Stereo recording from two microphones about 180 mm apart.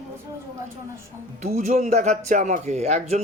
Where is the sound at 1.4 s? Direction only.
40° right (ahead or behind).